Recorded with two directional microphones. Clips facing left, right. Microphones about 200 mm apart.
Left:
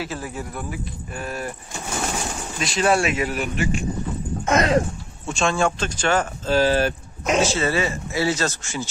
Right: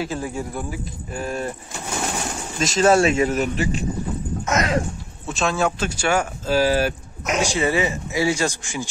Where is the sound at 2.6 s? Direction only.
45° right (ahead or behind).